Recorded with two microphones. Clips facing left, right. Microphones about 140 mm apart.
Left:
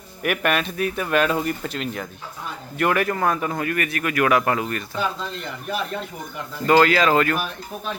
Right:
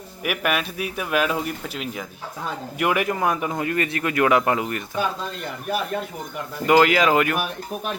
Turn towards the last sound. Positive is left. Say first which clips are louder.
# even
turn(degrees=-15)  # may be behind; listen again after turning